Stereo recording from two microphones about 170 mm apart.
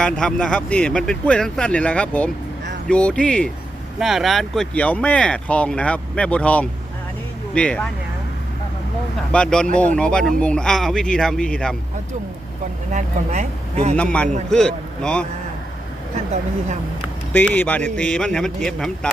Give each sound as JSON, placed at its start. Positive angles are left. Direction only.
{"t": 0.0, "sound": "speech", "side_deg": 5}
{"t": 9.3, "sound": "speech", "side_deg": 5}
{"t": 12.9, "sound": "speech", "side_deg": -45}
{"t": 13.9, "sound": "speech", "side_deg": 10}
{"t": 17.3, "sound": "speech", "side_deg": 10}